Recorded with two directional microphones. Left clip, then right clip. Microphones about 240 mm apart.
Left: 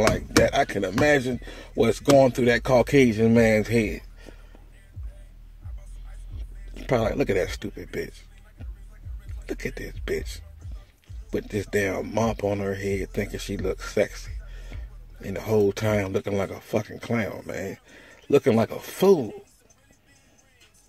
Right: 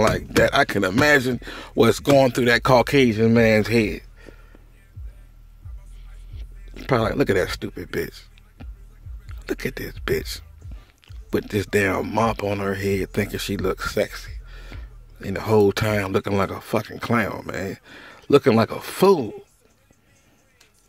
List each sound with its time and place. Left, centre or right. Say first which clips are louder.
0.1 s speech: right 2 dB; right
6.7 s speech: right 2 dB; centre